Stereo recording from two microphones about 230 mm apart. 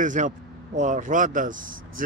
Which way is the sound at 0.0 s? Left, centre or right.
Right.